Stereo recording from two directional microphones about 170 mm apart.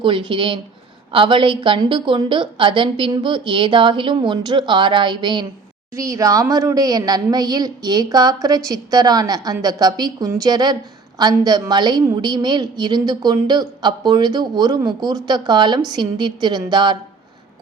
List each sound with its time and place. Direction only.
0.0 s a woman's voice: 30° right (ahead or behind)